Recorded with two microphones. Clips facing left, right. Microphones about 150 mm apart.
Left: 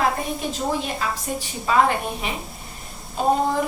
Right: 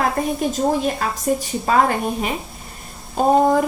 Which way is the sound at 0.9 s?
45° right (ahead or behind).